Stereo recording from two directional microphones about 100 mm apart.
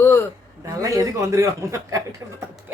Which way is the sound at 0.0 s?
25° left (ahead or behind).